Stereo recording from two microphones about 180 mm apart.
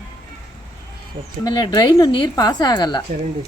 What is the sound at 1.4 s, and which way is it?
Speech, 20° left (ahead or behind).